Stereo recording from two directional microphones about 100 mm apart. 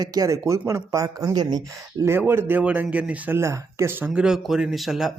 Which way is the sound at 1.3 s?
45° right (ahead or behind).